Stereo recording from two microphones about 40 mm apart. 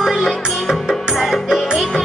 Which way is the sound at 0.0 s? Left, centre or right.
Centre.